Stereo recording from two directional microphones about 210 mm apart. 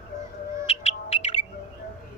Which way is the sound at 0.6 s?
30° left (ahead or behind).